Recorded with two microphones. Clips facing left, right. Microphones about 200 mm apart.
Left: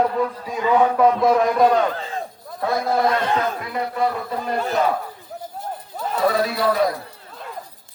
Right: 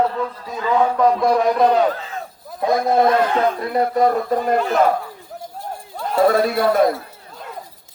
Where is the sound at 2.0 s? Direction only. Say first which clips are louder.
Left 2 dB; 30° left (ahead or behind).